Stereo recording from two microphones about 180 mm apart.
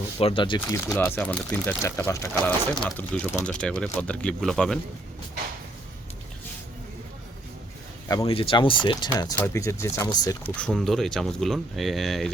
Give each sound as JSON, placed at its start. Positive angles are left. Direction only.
{"t": 0.2, "sound": "speech", "side_deg": 30}
{"t": 0.9, "sound": "speech", "side_deg": 10}
{"t": 2.8, "sound": "speech", "side_deg": 5}
{"t": 8.2, "sound": "speech", "side_deg": 30}
{"t": 10.6, "sound": "speech", "side_deg": 5}